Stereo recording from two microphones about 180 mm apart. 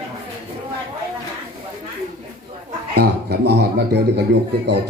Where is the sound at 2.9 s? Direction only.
65° right (ahead or behind).